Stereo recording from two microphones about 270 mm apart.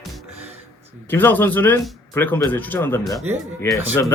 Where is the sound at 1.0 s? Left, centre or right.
Centre.